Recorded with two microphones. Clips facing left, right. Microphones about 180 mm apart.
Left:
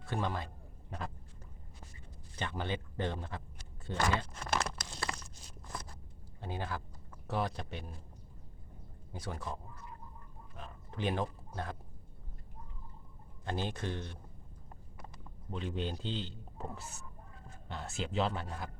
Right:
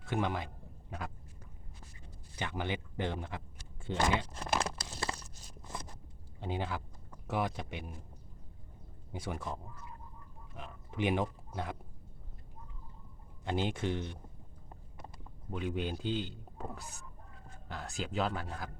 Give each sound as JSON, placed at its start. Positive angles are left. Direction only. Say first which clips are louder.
{"t": 0.1, "sound": "a sound", "louder": "right 2 dB", "side_deg": -15}
{"t": 2.3, "sound": "a man's voice", "louder": "right 1 dB", "side_deg": -15}
{"t": 4.6, "sound": "a sound", "louder": "right 2 dB", "side_deg": -30}
{"t": 5.1, "sound": "a sound", "louder": "even", "side_deg": -10}
{"t": 6.4, "sound": "a man's voice", "louder": "right 3 dB", "side_deg": -20}
{"t": 9.1, "sound": "speech", "louder": "right 2 dB", "side_deg": -20}
{"t": 10.6, "sound": "speech", "louder": "right 3 dB", "side_deg": -15}
{"t": 13.4, "sound": "a man's voice", "louder": "right 4 dB", "side_deg": -15}
{"t": 15.4, "sound": "a man's voice", "louder": "right 2 dB", "side_deg": -10}
{"t": 16.6, "sound": "speech", "louder": "even", "side_deg": 0}